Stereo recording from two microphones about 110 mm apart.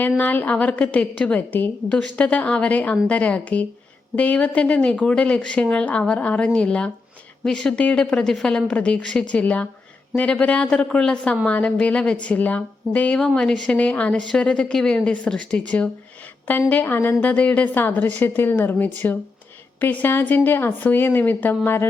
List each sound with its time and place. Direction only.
0.2 s speech: 15° left (ahead or behind)